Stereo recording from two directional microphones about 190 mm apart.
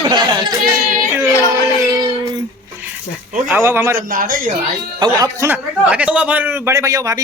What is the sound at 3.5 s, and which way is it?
Speech, 10° right (ahead or behind).